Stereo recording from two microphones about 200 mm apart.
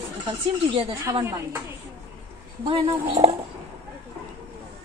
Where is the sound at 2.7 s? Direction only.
25° right (ahead or behind).